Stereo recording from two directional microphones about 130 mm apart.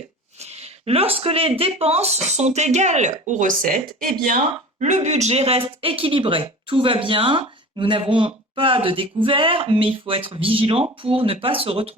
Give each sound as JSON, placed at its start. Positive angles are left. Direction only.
{"t": 0.3, "sound": "speech", "side_deg": -55}
{"t": 4.8, "sound": "speech", "side_deg": -60}